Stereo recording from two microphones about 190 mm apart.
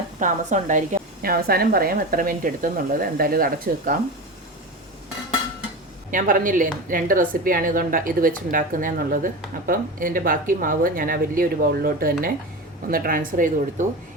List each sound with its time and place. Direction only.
0.2 s a woman's voice: 45° right (ahead or behind)
6.1 s a woman's voice: 45° right (ahead or behind)